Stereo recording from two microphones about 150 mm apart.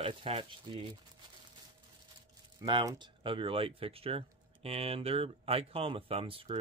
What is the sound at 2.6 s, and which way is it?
Speech, 30° right (ahead or behind).